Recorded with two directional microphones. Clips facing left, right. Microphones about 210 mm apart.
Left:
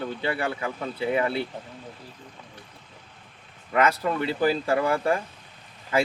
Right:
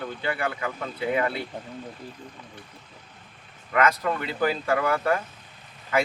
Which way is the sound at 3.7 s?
30° left (ahead or behind).